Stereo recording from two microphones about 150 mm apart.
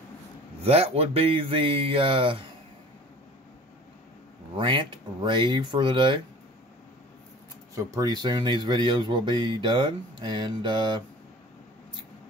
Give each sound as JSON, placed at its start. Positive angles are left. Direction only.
{"t": 0.7, "sound": "speech", "side_deg": -40}
{"t": 4.6, "sound": "speech", "side_deg": -30}
{"t": 7.7, "sound": "speech", "side_deg": -25}